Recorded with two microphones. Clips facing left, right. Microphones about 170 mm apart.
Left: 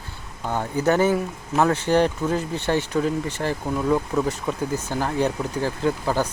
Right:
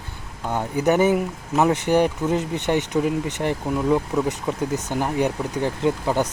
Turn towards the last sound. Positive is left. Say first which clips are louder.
# right 1 dB
turn(degrees=-20)  # may be behind; listen again after turning